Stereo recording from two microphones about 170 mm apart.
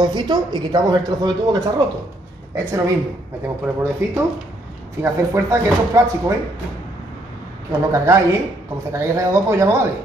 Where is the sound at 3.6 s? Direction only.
10° right (ahead or behind).